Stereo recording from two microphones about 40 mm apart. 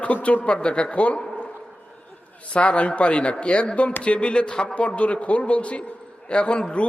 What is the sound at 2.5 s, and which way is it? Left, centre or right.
A man's voice, left.